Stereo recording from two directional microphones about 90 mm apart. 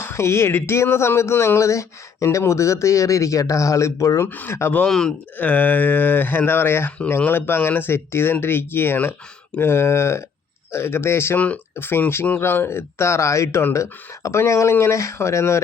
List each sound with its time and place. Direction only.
0.0 s speech: 30° left (ahead or behind)
4.3 s speech: 25° left (ahead or behind)
4.9 s speech: 5° left (ahead or behind)
5.4 s speech: 20° left (ahead or behind)
11.3 s speech: 15° left (ahead or behind); by 15.6 s 30° left (ahead or behind)